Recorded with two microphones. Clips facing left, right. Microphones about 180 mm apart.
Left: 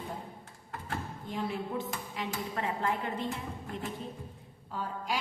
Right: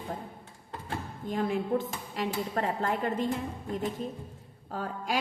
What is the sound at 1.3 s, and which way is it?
A woman's voice, 50° right (ahead or behind).